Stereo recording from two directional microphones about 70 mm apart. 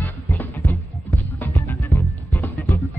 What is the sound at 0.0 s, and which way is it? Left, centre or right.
Music, left.